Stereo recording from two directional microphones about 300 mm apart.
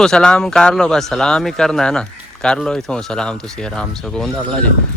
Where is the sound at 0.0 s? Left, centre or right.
Centre.